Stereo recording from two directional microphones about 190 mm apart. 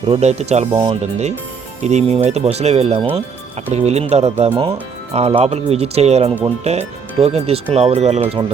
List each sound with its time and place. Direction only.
0.1 s speech: 35° right (ahead or behind)